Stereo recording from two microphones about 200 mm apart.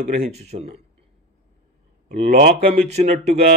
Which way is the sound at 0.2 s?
35° right (ahead or behind).